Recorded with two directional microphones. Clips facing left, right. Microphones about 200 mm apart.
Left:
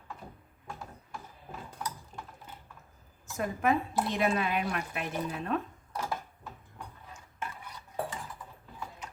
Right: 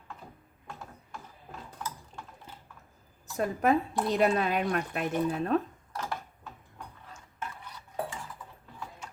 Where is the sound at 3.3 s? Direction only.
35° right (ahead or behind).